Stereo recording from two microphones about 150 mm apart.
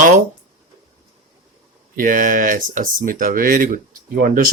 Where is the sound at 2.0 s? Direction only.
65° right (ahead or behind).